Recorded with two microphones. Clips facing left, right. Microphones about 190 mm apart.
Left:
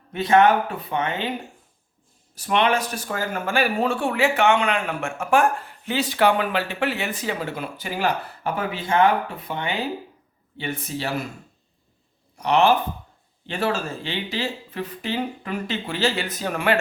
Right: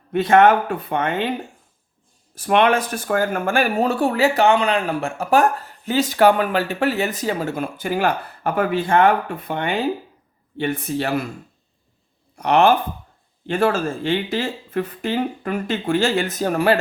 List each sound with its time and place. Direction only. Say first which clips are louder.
0.1 s speech: right 3 dB; 55° right (ahead or behind)
2.3 s speech: right 4 dB; 55° right (ahead or behind)
12.4 s speech: right 3 dB; 55° right (ahead or behind); by 16.7 s 40° right (ahead or behind)